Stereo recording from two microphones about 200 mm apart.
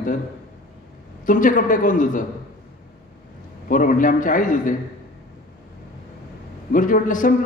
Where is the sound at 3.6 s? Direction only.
45° left (ahead or behind).